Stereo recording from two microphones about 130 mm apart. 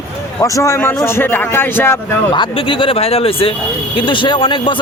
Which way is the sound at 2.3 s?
40° left (ahead or behind).